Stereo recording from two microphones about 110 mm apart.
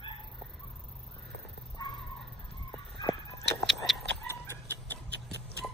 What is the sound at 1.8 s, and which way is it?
Bow-wow, 35° left (ahead or behind).